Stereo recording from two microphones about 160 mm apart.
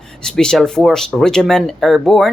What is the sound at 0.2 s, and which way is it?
Speech, 5° left (ahead or behind).